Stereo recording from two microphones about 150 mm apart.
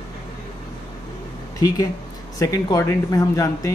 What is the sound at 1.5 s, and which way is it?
Speech, 25° left (ahead or behind).